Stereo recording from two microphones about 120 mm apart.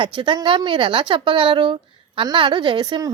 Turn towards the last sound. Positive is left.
turn(degrees=-35)  # may be behind; listen again after turning